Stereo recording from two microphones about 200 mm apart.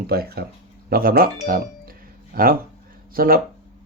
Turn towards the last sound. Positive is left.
turn(degrees=-45)  # may be behind; listen again after turning